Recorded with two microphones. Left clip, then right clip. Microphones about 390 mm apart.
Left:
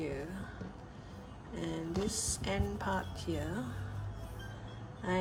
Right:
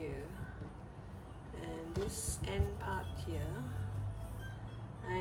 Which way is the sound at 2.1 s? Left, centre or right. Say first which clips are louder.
Left 5 dB; centre.